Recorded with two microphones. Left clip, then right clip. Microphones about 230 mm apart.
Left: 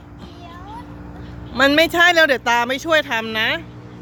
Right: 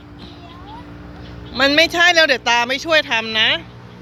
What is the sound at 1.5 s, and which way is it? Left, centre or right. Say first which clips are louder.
Speech: even; centre.